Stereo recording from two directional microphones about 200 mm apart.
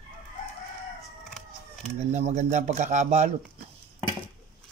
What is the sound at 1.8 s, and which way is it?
Speech, 35° right (ahead or behind).